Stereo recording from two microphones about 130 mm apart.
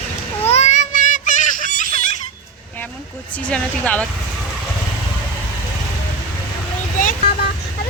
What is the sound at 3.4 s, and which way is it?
Speech, 10° left (ahead or behind).